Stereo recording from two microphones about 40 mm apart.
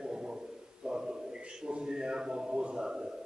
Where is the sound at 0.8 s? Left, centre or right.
Centre.